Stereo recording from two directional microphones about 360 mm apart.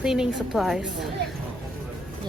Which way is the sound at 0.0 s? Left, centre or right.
Centre.